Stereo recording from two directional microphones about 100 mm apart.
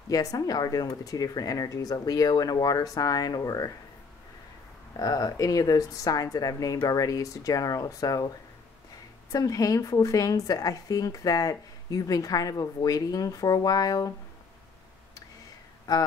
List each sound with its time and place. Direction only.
0.1 s a woman's voice: 35° left (ahead or behind)
4.9 s a woman's voice: 35° left (ahead or behind)
9.3 s a woman's voice: 35° left (ahead or behind)